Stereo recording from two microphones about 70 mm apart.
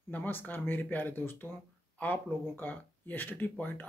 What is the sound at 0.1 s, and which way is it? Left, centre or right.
Speech, left.